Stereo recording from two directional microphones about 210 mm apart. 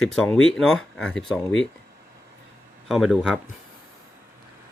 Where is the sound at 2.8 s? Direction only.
Centre (ahead or behind).